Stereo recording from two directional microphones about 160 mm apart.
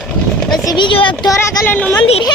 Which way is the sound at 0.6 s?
25° left (ahead or behind).